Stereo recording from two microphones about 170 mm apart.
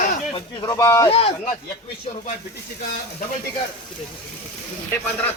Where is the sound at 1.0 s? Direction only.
35° left (ahead or behind).